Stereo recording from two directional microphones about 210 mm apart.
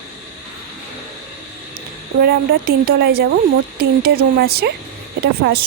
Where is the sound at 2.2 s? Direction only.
45° right (ahead or behind).